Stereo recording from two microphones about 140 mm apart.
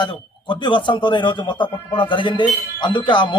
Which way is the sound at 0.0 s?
35° left (ahead or behind).